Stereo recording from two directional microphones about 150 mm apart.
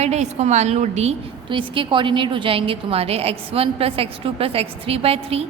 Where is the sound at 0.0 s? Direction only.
45° right (ahead or behind).